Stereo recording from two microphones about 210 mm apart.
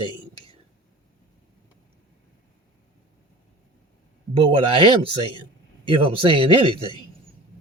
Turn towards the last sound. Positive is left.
turn(degrees=-25)  # may be behind; listen again after turning